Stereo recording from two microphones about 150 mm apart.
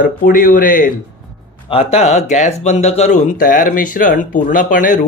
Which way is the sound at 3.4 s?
65° left (ahead or behind).